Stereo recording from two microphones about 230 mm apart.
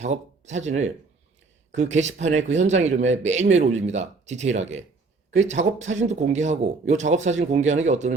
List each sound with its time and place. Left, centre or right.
0.0 s speech: right